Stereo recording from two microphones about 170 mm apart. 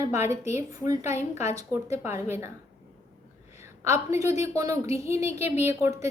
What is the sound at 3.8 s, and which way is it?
A woman's voice, 15° right (ahead or behind).